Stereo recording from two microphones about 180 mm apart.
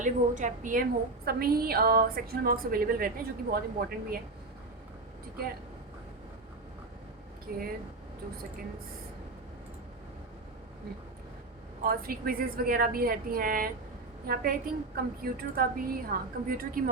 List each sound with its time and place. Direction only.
0.0 s a woman's voice: 45° right (ahead or behind)
11.8 s a woman's voice: 55° right (ahead or behind)